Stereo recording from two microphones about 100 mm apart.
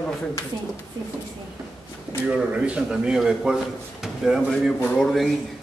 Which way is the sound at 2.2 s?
10° right (ahead or behind).